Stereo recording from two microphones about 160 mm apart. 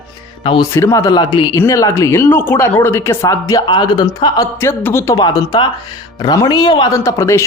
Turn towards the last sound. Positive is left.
turn(degrees=20)  # may be behind; listen again after turning